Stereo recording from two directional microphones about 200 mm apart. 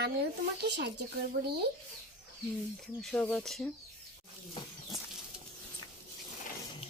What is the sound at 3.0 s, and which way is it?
Speech, 5° left (ahead or behind).